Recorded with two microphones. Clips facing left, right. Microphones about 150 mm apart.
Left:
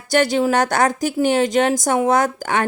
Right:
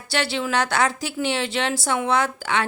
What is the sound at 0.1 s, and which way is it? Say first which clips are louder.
Speech: left 8 dB; 45° left (ahead or behind).